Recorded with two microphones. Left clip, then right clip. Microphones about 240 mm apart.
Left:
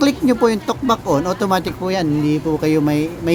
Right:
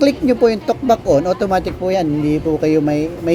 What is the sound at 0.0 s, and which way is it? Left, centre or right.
Speech, centre.